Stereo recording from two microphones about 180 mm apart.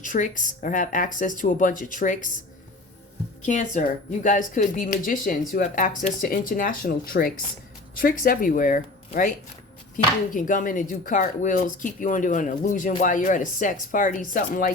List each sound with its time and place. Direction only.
0.0 s a woman's voice: 45° left (ahead or behind)
3.4 s a woman's voice: 45° left (ahead or behind)
10.3 s a woman's voice: 45° left (ahead or behind)